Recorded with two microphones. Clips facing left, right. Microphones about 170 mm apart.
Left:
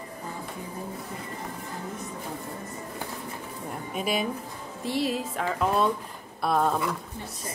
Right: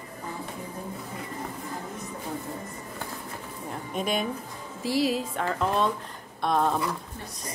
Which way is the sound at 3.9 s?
5° left (ahead or behind).